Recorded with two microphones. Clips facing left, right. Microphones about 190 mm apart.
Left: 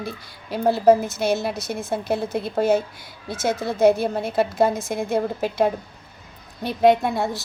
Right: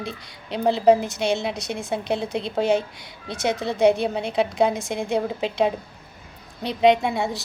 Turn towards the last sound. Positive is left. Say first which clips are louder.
# left 1 dB
turn(degrees=0)  # may be behind; listen again after turning